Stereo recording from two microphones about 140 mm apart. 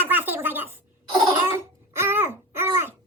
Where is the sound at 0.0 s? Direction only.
15° right (ahead or behind).